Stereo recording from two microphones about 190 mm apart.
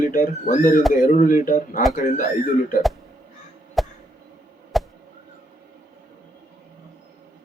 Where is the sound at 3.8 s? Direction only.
Centre (ahead or behind).